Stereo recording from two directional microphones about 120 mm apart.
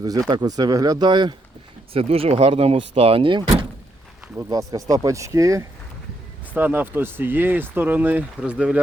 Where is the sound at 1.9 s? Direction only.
55° right (ahead or behind).